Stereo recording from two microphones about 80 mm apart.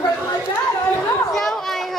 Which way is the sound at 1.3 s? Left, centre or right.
Centre.